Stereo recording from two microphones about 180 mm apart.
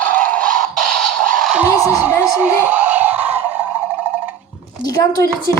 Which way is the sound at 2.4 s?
10° right (ahead or behind).